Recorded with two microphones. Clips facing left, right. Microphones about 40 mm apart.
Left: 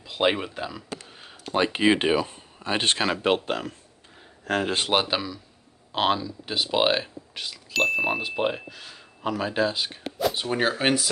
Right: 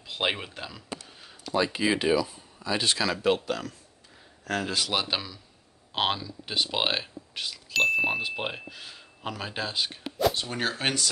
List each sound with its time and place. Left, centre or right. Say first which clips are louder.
0.0 s speech: left 5 dB; centre
1.4 s speech: left 4 dB; left
5.0 s speech: left 4 dB; centre
10.3 s speech: left 5 dB; centre